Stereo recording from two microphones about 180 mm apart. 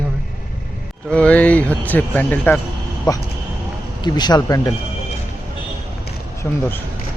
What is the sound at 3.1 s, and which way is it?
Speech, 20° left (ahead or behind).